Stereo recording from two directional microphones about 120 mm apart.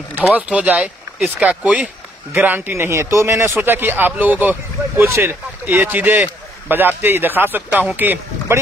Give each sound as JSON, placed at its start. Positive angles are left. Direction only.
{"t": 0.3, "sound": "a man's voice", "side_deg": -10}